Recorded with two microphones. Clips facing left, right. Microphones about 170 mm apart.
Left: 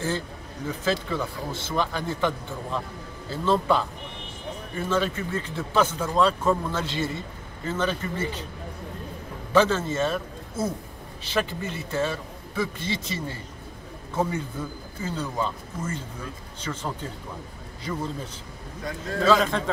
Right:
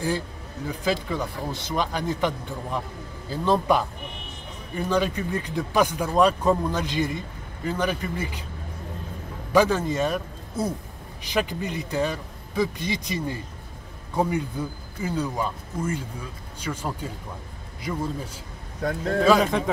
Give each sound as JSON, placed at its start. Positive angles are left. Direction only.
{"t": 0.7, "sound": "speech", "side_deg": -15}
{"t": 9.5, "sound": "a man's voice", "side_deg": -15}
{"t": 15.0, "sound": "speech", "side_deg": -10}
{"t": 18.8, "sound": "a man's voice", "side_deg": -60}
{"t": 19.2, "sound": "speech", "side_deg": -15}